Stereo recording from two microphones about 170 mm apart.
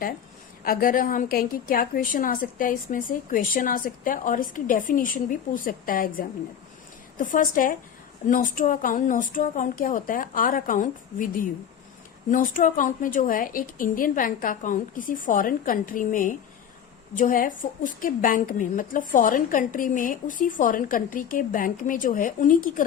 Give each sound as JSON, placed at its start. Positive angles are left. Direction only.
{"t": 0.6, "sound": "a woman's voice", "side_deg": 60}